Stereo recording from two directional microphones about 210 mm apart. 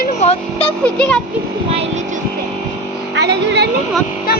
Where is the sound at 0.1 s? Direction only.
30° left (ahead or behind).